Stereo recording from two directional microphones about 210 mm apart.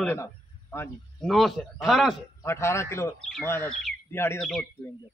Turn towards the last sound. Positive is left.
turn(degrees=5)  # may be behind; listen again after turning